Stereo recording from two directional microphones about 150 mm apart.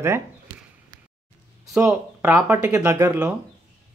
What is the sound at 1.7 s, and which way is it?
Speech, 15° right (ahead or behind).